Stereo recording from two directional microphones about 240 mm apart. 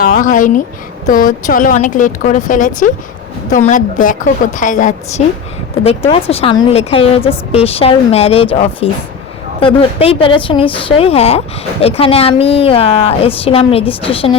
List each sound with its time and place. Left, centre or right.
0.0 s speech: left